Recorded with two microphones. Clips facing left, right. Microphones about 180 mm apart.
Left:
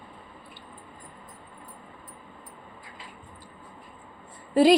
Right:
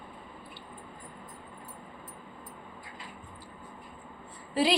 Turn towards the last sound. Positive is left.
turn(degrees=50)  # may be behind; listen again after turning